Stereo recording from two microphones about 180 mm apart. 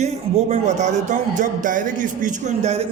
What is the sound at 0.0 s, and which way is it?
A man's voice, 40° right (ahead or behind).